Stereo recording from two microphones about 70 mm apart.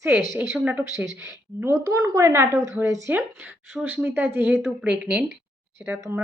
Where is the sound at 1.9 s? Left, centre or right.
Right.